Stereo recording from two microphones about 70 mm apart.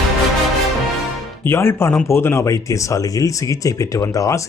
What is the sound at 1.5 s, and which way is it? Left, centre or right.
Speech, left.